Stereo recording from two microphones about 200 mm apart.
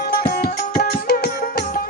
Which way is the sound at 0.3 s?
50° left (ahead or behind).